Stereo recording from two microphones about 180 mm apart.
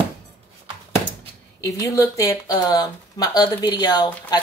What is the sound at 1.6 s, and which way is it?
Speech, 20° left (ahead or behind).